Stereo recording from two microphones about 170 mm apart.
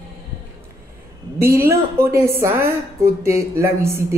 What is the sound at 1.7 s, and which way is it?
A woman's voice, 15° right (ahead or behind).